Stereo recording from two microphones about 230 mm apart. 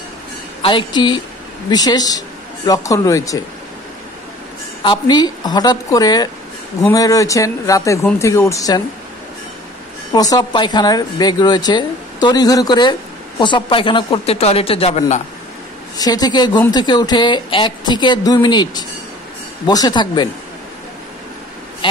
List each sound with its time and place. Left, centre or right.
0.6 s speech: left
4.8 s a woman's voice: centre
10.1 s a woman's voice: centre
16.0 s speech: centre